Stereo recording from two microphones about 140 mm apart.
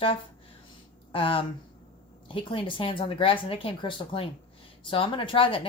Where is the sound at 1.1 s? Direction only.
40° left (ahead or behind).